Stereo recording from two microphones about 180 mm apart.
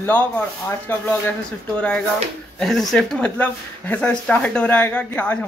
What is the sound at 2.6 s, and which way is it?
Speech, centre (ahead or behind).